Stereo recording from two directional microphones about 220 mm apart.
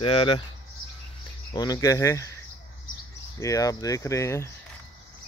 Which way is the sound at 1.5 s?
15° left (ahead or behind).